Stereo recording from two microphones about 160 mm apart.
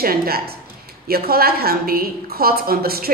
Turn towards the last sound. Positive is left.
turn(degrees=-70)  # may be behind; listen again after turning